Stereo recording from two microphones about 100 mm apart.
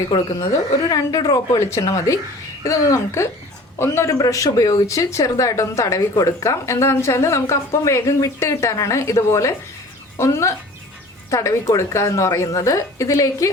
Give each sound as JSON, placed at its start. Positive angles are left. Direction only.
{"t": 0.1, "sound": "a woman's voice", "side_deg": 45}
{"t": 0.4, "sound": "speech", "side_deg": 35}